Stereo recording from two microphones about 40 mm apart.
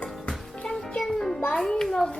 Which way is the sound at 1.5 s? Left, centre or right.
Centre.